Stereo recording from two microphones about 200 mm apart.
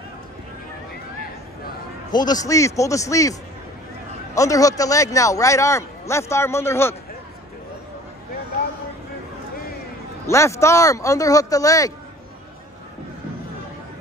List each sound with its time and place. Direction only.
2.1 s a man's voice: 20° left (ahead or behind)
4.4 s a man's voice: 15° left (ahead or behind)
10.2 s a man's voice: 15° left (ahead or behind)